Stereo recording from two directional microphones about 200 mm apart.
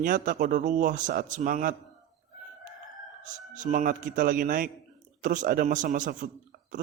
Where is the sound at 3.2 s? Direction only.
40° right (ahead or behind).